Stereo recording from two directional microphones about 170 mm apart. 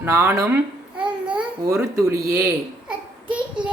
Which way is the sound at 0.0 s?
15° right (ahead or behind).